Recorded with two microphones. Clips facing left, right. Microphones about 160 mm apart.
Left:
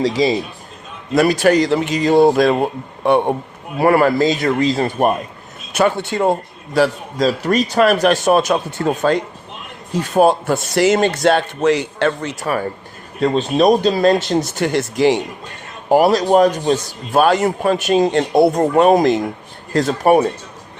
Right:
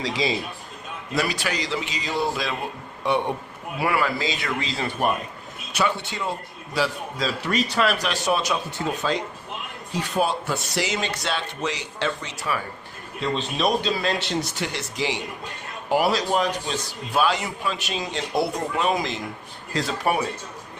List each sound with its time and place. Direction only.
0.0 s speech: 45° left (ahead or behind)